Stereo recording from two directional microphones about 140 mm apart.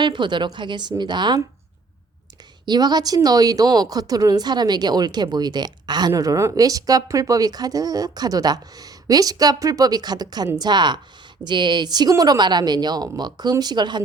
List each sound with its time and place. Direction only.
0.0 s a woman's voice: 35° right (ahead or behind)
2.6 s a woman's voice: 30° right (ahead or behind)